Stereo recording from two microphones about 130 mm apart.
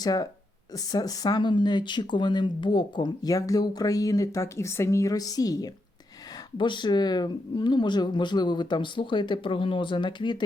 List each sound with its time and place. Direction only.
0.0 s speech: 30° left (ahead or behind)